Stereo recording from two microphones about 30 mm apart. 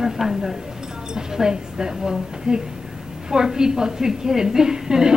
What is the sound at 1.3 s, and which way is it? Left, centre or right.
A woman's voice, right.